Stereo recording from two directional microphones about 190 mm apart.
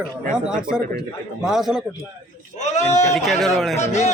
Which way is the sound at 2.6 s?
35° left (ahead or behind).